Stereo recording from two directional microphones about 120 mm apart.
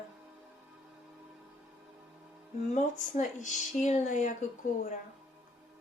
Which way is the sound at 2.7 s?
90° left.